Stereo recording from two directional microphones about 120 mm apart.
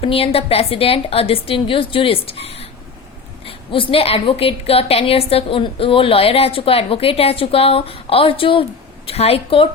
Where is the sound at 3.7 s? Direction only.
45° left (ahead or behind).